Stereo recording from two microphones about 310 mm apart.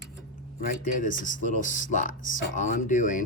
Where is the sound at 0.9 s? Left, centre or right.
Left.